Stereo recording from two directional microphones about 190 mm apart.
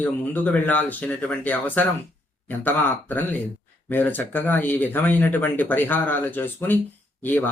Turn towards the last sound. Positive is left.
turn(degrees=10)  # may be behind; listen again after turning